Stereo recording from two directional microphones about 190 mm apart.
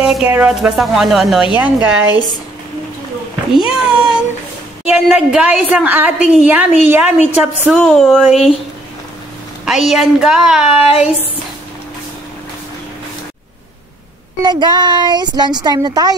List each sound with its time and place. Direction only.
0.0 s speech: 5° right (ahead or behind)
3.5 s a woman's voice: 5° right (ahead or behind)
7.7 s speech: 5° left (ahead or behind)
9.7 s speech: centre (ahead or behind)
14.4 s a woman's voice: 25° right (ahead or behind)